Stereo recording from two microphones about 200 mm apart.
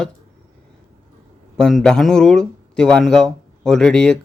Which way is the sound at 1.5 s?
5° left (ahead or behind).